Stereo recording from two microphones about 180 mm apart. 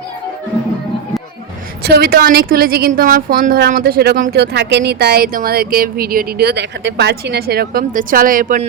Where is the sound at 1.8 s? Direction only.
65° right (ahead or behind).